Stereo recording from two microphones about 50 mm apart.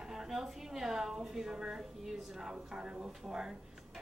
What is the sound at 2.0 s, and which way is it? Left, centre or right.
A woman's voice, centre.